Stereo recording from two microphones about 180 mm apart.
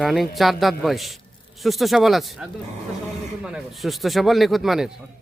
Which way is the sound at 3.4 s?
5° right (ahead or behind).